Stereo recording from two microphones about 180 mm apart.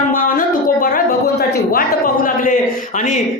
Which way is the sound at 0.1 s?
50° left (ahead or behind).